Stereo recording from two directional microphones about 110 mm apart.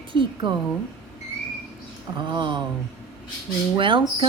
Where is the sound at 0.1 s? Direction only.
50° right (ahead or behind).